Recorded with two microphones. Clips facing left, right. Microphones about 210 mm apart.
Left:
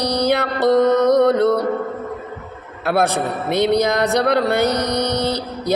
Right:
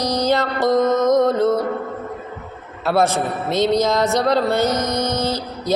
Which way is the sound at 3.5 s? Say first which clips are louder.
Left 1 dB; 15° left (ahead or behind).